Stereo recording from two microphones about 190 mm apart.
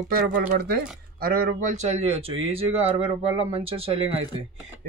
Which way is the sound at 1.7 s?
35° right (ahead or behind).